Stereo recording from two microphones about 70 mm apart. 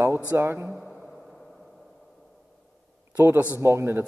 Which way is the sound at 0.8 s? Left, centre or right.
Centre.